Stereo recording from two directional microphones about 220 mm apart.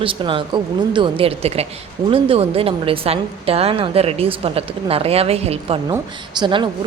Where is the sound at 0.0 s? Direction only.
25° right (ahead or behind).